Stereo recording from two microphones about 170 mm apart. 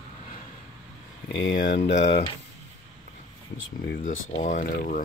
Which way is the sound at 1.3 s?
90° left.